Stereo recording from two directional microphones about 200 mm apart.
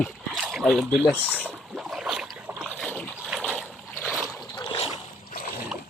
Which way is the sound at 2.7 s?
5° left (ahead or behind).